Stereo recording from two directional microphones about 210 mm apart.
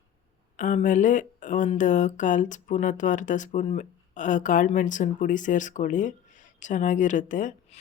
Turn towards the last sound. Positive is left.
turn(degrees=40)  # may be behind; listen again after turning